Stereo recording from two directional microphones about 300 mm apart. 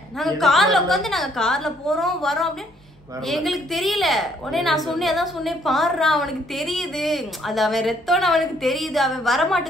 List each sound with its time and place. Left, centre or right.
0.2 s a woman's voice: centre